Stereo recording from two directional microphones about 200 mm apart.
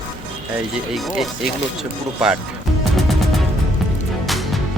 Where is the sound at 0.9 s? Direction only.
Centre (ahead or behind).